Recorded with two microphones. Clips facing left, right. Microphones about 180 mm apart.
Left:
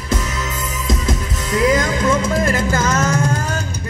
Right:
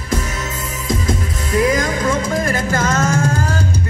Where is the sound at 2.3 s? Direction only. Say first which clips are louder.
Left 1 dB; 25° left (ahead or behind).